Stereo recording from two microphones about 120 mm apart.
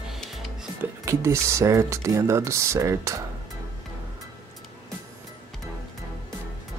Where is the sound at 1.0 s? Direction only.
25° right (ahead or behind).